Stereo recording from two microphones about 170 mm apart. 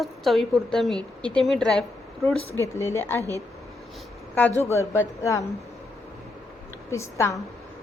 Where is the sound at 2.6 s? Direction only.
15° left (ahead or behind).